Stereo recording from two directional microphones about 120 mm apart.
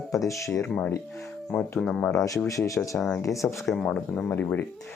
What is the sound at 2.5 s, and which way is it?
Speech, 25° left (ahead or behind).